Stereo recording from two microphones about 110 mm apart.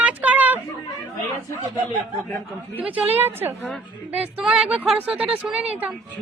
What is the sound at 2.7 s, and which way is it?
Speech, 15° right (ahead or behind).